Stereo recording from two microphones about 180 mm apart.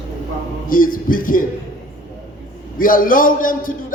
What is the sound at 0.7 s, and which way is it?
Speech, 50° left (ahead or behind).